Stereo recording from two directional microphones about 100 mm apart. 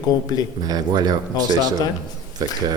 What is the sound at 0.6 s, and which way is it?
Speech, 40° right (ahead or behind).